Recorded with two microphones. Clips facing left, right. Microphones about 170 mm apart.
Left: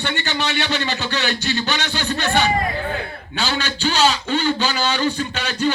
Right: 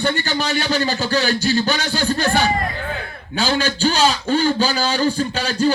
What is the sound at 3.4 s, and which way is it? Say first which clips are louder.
A man's voice: right 4 dB; 40° right (ahead or behind).